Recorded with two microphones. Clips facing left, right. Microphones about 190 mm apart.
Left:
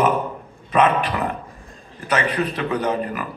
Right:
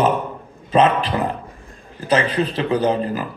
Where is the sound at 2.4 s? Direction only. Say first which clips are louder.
Right 4 dB; 30° right (ahead or behind).